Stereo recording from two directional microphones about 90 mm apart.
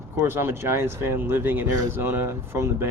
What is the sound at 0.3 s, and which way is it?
Speech, 25° right (ahead or behind).